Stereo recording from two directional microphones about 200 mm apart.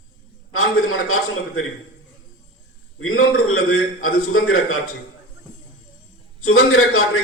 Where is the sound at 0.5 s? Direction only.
90° left.